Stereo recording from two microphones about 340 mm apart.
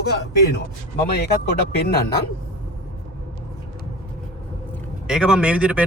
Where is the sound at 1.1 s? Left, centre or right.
Left.